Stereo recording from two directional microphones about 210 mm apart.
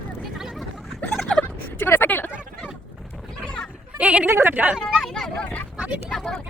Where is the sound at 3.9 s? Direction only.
5° right (ahead or behind).